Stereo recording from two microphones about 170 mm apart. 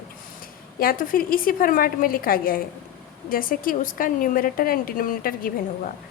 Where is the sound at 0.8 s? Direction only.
55° left (ahead or behind).